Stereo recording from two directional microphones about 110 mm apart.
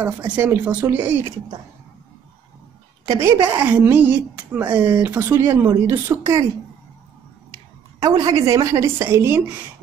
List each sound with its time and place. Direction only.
0.4 s speech: 15° right (ahead or behind)
3.1 s speech: 25° right (ahead or behind)
3.4 s speech: 15° right (ahead or behind)
8.0 s speech: 35° right (ahead or behind)